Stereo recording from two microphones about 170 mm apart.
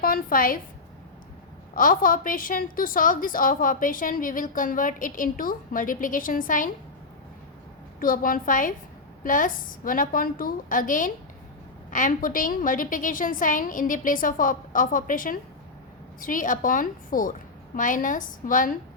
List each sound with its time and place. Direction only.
0.0 s a woman's voice: 55° left (ahead or behind)
1.7 s a woman's voice: 55° left (ahead or behind)
7.9 s a woman's voice: 55° left (ahead or behind)